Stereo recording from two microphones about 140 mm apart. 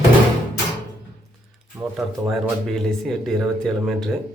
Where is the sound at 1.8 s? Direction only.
Centre (ahead or behind).